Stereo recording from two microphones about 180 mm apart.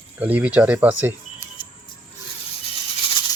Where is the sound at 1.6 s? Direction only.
25° left (ahead or behind).